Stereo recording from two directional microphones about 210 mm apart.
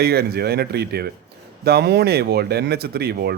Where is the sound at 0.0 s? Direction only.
50° right (ahead or behind).